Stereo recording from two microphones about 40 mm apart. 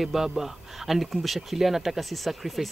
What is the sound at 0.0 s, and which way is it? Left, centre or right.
Speech, centre.